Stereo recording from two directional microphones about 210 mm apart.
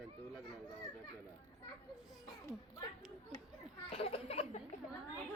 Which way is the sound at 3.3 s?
20° left (ahead or behind).